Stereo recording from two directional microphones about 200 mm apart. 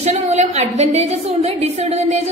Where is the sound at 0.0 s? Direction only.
35° right (ahead or behind).